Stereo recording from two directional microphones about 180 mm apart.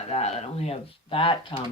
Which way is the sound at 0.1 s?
35° left (ahead or behind).